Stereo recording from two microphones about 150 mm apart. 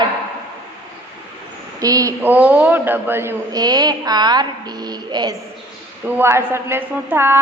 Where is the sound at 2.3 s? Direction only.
10° right (ahead or behind); by 5.4 s 25° right (ahead or behind).